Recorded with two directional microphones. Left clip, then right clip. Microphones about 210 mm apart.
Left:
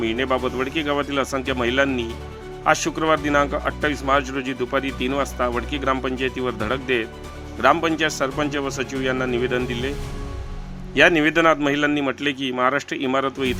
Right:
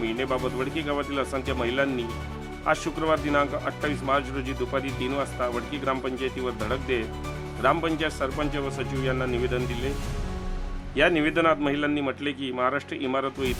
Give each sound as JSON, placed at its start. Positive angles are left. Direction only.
{"t": 0.0, "sound": "speech", "side_deg": 15}
{"t": 10.9, "sound": "speech", "side_deg": 15}